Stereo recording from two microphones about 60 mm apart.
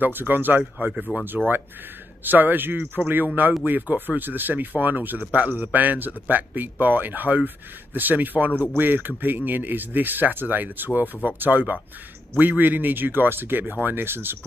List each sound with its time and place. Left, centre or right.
0.0 s speech: right
2.2 s a man's voice: right